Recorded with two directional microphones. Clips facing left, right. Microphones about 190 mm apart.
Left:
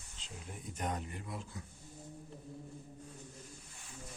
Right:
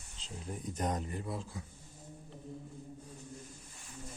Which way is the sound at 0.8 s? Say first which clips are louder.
Right 3 dB; 40° right (ahead or behind).